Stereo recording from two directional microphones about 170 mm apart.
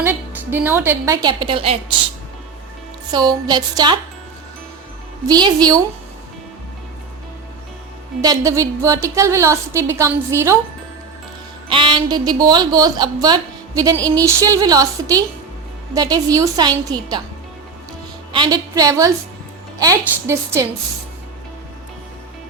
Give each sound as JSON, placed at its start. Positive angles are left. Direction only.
{"t": 0.0, "sound": "a woman's voice", "side_deg": -10}
{"t": 3.1, "sound": "a woman's voice", "side_deg": -25}
{"t": 5.3, "sound": "a woman's voice", "side_deg": -25}
{"t": 8.2, "sound": "a woman's voice", "side_deg": -20}
{"t": 11.7, "sound": "a woman's voice", "side_deg": -30}
{"t": 18.3, "sound": "a woman's voice", "side_deg": -25}